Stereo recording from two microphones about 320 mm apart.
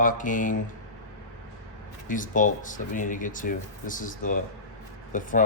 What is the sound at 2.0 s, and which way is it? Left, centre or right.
Speech, left.